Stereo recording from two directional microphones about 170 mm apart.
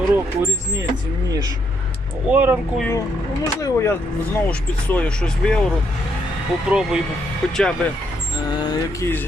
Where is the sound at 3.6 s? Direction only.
15° left (ahead or behind).